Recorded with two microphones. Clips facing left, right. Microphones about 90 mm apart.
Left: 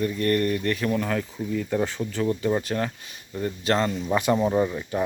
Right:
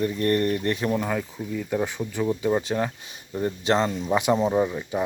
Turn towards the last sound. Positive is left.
turn(degrees=-10)  # may be behind; listen again after turning